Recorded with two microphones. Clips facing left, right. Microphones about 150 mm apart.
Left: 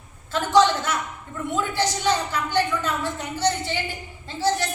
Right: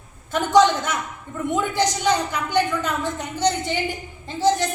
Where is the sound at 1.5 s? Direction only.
20° right (ahead or behind).